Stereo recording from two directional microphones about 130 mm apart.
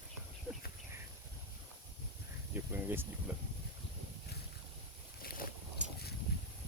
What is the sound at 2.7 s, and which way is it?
Speech, 15° right (ahead or behind).